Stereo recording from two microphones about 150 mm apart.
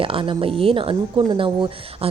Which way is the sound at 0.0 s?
35° right (ahead or behind).